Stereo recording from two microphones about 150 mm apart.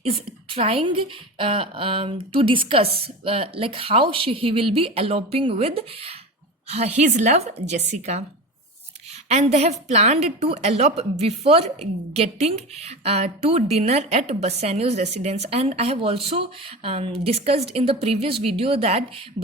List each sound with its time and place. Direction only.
0.0 s a woman's voice: 40° right (ahead or behind)
9.3 s a woman's voice: 50° right (ahead or behind)